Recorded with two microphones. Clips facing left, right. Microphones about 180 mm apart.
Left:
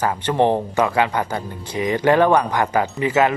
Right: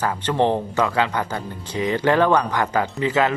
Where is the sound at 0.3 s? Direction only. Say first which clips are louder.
Left 2 dB; 15° left (ahead or behind).